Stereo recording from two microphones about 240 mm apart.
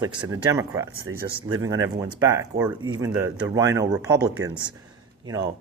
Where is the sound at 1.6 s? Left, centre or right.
Centre.